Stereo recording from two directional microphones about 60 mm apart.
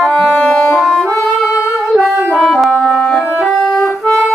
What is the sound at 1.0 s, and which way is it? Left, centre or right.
Music, centre.